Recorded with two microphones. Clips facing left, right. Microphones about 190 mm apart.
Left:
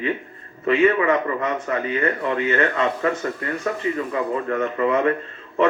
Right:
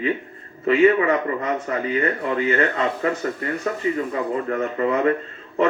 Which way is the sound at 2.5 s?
35° right (ahead or behind).